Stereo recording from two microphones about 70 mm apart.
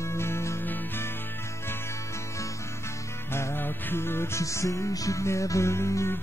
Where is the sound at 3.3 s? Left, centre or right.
Left.